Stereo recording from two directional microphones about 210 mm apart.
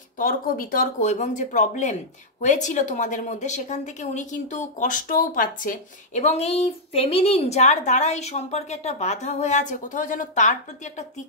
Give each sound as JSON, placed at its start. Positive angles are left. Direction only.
{"t": 0.2, "sound": "a woman's voice", "side_deg": 45}